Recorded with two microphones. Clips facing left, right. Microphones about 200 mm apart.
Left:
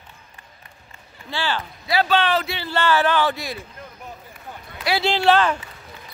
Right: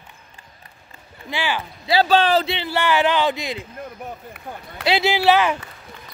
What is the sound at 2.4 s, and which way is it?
Speech, 20° right (ahead or behind).